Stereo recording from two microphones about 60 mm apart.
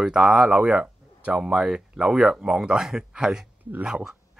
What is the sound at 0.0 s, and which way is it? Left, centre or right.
Speech, centre.